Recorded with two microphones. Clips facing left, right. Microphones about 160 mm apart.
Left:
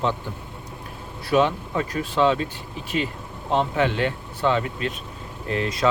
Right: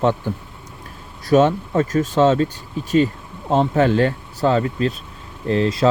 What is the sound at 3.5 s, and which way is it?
Speech, 45° right (ahead or behind).